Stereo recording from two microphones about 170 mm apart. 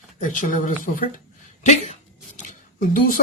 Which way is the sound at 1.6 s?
40° left (ahead or behind).